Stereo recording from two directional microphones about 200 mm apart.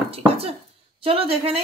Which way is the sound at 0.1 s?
30° right (ahead or behind).